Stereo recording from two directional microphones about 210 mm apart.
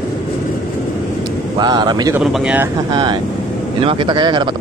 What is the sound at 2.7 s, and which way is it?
A man's voice, 20° right (ahead or behind).